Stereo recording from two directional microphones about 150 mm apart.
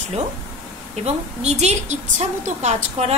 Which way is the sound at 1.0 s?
45° right (ahead or behind).